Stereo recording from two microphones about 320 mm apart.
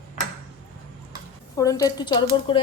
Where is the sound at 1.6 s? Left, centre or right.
Centre.